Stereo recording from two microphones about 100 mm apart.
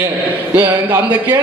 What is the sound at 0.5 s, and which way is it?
Speech, 20° right (ahead or behind).